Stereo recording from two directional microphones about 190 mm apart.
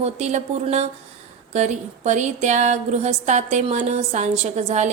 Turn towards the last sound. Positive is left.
turn(degrees=-35)  # may be behind; listen again after turning